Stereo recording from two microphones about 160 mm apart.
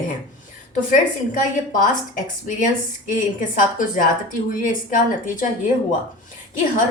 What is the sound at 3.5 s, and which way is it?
A woman's voice, 55° left (ahead or behind).